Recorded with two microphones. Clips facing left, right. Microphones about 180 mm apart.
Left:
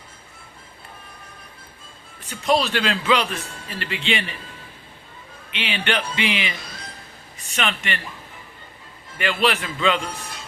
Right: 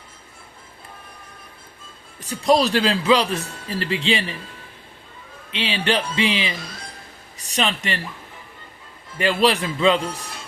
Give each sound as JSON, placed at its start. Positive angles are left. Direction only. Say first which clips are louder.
{"t": 2.2, "sound": "a man's voice", "louder": "right 3 dB", "side_deg": -35}
{"t": 5.5, "sound": "a man's voice", "louder": "right 3 dB", "side_deg": -30}
{"t": 9.1, "sound": "a man's voice", "louder": "right 3 dB", "side_deg": -35}